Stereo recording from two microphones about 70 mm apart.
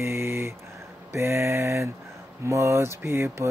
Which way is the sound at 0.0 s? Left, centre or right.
Right.